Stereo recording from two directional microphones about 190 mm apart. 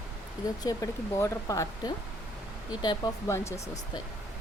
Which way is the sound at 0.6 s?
20° left (ahead or behind).